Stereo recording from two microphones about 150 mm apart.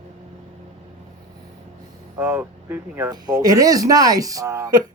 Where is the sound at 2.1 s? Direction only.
15° right (ahead or behind).